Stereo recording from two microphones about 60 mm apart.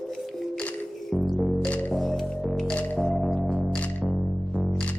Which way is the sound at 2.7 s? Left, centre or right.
Left.